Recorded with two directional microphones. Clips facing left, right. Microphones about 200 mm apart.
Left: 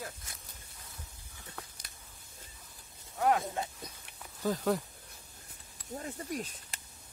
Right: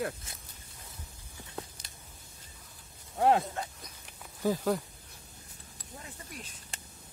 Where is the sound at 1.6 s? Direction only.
25° right (ahead or behind).